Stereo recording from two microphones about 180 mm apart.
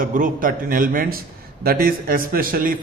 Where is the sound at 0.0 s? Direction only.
45° right (ahead or behind).